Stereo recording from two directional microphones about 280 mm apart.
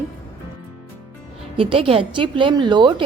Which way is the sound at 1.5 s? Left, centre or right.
Centre.